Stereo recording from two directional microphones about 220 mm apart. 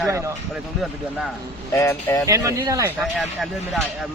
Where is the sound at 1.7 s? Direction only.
15° left (ahead or behind).